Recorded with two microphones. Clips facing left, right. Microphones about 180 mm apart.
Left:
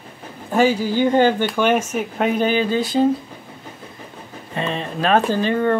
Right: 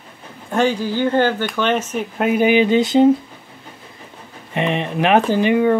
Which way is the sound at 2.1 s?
5° right (ahead or behind).